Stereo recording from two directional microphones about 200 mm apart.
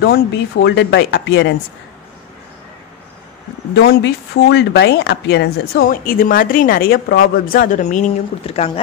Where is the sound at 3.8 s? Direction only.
55° left (ahead or behind).